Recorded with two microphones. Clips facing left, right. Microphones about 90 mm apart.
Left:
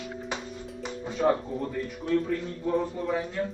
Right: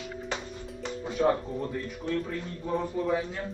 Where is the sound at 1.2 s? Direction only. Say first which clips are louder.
Left 2 dB; centre (ahead or behind).